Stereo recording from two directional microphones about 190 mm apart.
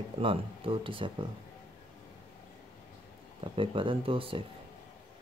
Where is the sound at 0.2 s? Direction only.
25° right (ahead or behind).